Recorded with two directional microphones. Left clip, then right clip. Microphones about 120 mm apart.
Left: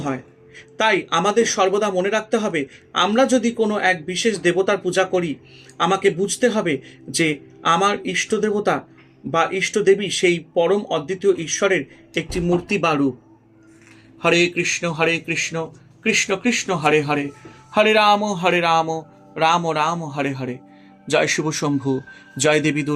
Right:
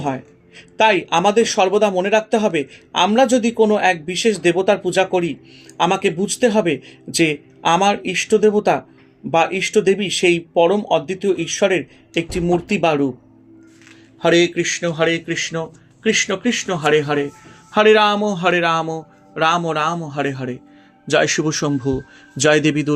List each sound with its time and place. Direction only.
0.0 s speech: 40° right (ahead or behind)
14.2 s a man's voice: 25° right (ahead or behind)